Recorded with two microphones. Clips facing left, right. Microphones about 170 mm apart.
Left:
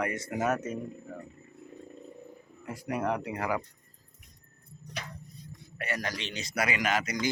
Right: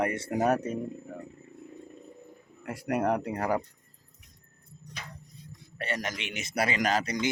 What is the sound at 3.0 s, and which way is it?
Speech, 45° right (ahead or behind).